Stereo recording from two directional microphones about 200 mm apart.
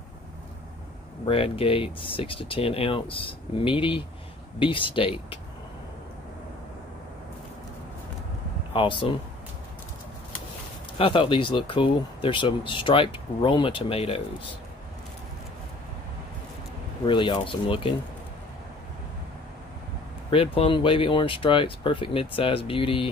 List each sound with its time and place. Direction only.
1.2 s speech: 25° left (ahead or behind)
8.7 s speech: 25° left (ahead or behind)
11.0 s speech: 25° left (ahead or behind)
17.0 s speech: 25° left (ahead or behind)
20.2 s speech: 25° left (ahead or behind)